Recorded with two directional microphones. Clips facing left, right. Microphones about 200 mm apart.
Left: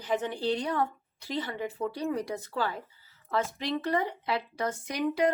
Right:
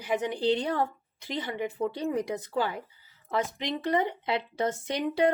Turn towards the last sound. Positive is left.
turn(degrees=-25)  # may be behind; listen again after turning